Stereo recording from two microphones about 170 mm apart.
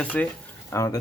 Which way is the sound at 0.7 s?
20° left (ahead or behind).